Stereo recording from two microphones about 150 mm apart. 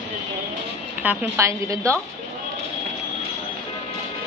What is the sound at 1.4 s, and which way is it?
Speech, 20° right (ahead or behind).